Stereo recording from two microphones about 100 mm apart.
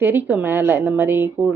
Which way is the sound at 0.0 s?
20° right (ahead or behind).